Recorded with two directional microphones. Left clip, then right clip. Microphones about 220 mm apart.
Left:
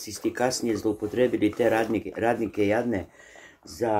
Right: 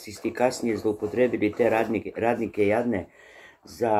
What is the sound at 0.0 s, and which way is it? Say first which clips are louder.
Speech: left 2 dB; 60° left (ahead or behind).